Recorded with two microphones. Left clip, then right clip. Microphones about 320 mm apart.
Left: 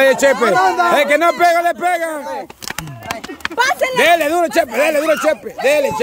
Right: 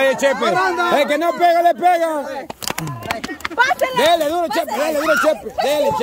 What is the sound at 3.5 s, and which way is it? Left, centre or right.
Speech, left.